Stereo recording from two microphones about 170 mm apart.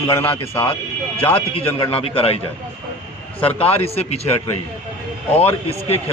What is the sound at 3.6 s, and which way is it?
Speech, 35° left (ahead or behind).